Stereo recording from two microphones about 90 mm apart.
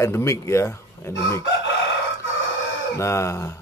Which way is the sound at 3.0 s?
35° left (ahead or behind).